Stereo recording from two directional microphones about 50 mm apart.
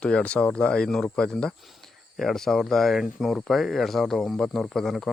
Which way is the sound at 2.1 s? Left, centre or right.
Centre.